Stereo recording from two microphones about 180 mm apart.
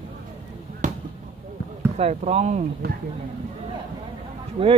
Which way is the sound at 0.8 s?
45° right (ahead or behind).